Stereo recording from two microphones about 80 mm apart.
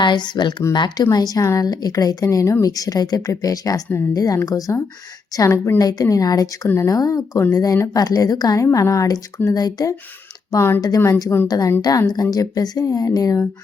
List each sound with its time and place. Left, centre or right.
0.0 s speech: left
1.1 s speech: left
5.5 s a woman's voice: left
5.8 s speech: left
6.7 s a woman's voice: left
6.9 s speech: left
11.4 s speech: left